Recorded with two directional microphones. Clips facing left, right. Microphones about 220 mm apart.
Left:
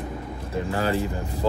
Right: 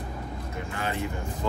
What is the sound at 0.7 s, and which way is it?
Speech, 35° left (ahead or behind).